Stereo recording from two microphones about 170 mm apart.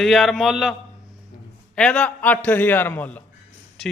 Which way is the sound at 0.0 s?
Centre (ahead or behind).